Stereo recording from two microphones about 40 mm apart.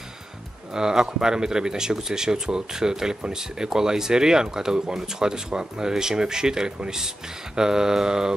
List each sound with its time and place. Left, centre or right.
0.7 s speech: centre